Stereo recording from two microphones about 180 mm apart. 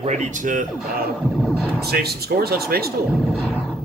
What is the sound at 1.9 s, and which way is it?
Speech, 60° right (ahead or behind).